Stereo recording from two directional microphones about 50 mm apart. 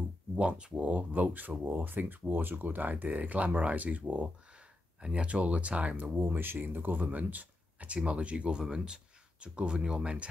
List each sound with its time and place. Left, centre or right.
0.4 s speech: right
6.1 s speech: right